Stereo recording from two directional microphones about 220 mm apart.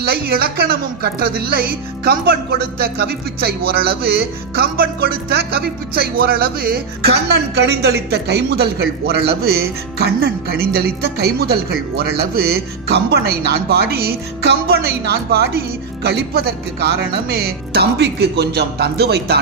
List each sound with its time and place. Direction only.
0.0 s speech: 45° right (ahead or behind)